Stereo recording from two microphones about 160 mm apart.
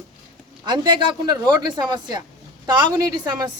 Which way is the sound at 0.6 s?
30° right (ahead or behind).